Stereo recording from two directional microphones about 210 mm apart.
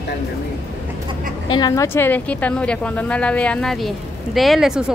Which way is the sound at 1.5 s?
15° left (ahead or behind).